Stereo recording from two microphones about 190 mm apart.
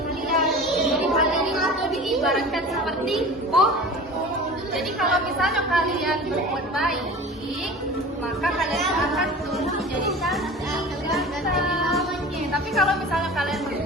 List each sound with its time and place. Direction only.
0.9 s a sound: centre (ahead or behind)
3.1 s a woman's voice: centre (ahead or behind)
4.9 s a woman's voice: centre (ahead or behind)
8.4 s a woman's voice: centre (ahead or behind)
11.1 s child singing: centre (ahead or behind)
12.7 s a woman's voice: centre (ahead or behind)